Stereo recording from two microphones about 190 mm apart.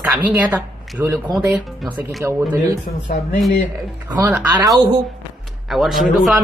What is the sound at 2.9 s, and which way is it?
Speech, 45° left (ahead or behind).